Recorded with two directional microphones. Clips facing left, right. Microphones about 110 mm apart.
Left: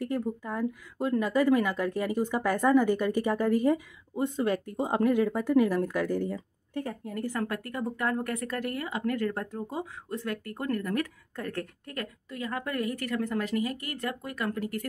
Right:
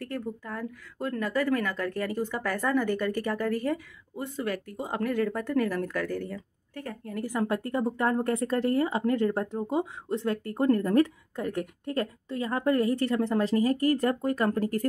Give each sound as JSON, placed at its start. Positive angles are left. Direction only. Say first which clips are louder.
{"t": 0.0, "sound": "a woman's voice", "louder": "left 4 dB", "side_deg": 15}
{"t": 7.4, "sound": "speech", "louder": "right 5 dB", "side_deg": -25}
{"t": 11.3, "sound": "speech", "louder": "right 4 dB", "side_deg": -20}